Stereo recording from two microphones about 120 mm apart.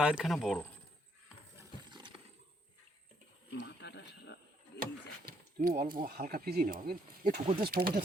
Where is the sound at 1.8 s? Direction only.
40° right (ahead or behind).